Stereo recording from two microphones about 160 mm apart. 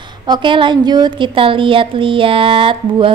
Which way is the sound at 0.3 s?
30° right (ahead or behind).